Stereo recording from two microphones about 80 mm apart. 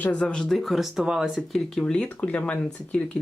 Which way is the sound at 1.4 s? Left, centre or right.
Centre.